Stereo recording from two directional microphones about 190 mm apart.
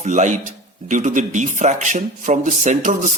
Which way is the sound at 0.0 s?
40° right (ahead or behind).